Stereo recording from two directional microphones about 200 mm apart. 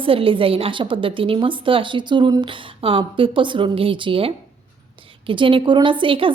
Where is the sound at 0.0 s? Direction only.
25° right (ahead or behind).